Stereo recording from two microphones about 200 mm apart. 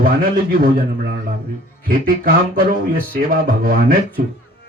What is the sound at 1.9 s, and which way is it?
Speech, 45° right (ahead or behind).